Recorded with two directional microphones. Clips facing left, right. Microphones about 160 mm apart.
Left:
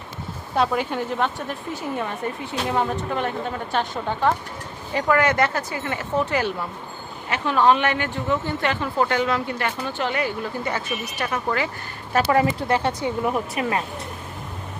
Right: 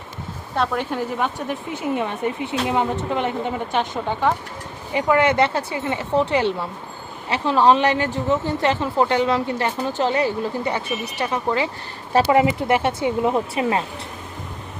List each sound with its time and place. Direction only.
0.5 s a woman's voice: 5° left (ahead or behind); by 13.8 s 25° right (ahead or behind)